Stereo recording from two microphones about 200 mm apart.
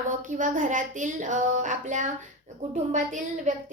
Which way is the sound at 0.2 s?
40° right (ahead or behind).